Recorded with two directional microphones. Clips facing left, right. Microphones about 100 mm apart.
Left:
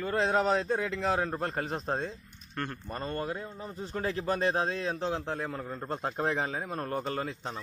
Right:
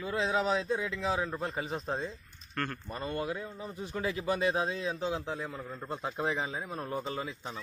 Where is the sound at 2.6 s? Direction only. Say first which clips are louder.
Even; 20° left (ahead or behind).